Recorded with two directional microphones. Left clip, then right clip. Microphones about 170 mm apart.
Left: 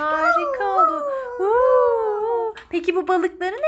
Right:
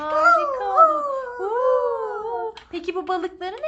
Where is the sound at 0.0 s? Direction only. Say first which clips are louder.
Right 1 dB; 30° left (ahead or behind).